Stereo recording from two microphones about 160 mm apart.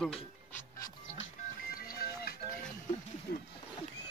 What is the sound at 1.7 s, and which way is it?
Music, 70° left (ahead or behind).